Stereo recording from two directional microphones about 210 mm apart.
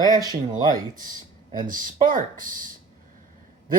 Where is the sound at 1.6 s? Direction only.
40° right (ahead or behind).